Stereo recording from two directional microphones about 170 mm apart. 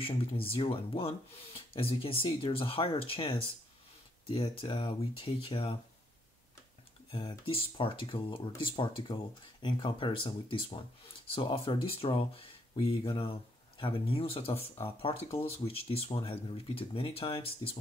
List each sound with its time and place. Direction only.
0.0 s speech: 35° left (ahead or behind)
7.1 s speech: 30° left (ahead or behind)